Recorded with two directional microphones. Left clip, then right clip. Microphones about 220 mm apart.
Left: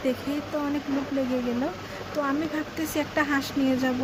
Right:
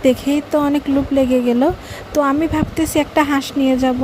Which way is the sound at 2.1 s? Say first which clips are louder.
Right 12 dB; 40° right (ahead or behind).